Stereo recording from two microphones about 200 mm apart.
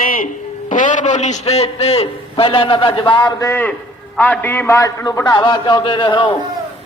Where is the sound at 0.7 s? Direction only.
40° left (ahead or behind).